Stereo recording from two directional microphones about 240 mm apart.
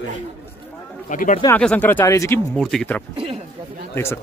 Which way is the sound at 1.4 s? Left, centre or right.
Centre.